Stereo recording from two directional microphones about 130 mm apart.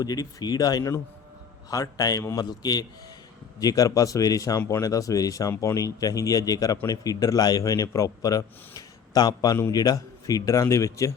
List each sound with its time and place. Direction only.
0.0 s a man's voice: 30° left (ahead or behind)